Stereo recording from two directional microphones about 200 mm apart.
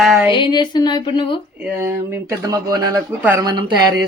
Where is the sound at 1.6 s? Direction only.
10° right (ahead or behind).